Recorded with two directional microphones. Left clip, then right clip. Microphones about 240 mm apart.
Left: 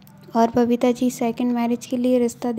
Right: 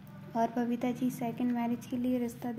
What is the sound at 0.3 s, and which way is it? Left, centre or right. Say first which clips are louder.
A woman's voice: left 13 dB; left.